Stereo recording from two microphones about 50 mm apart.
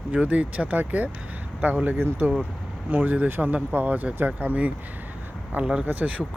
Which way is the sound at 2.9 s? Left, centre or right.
Right.